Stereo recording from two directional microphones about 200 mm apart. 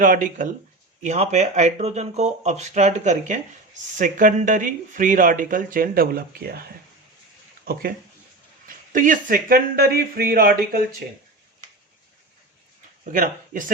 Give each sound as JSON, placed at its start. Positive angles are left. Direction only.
{"t": 0.0, "sound": "speech", "side_deg": -40}
{"t": 13.1, "sound": "speech", "side_deg": -40}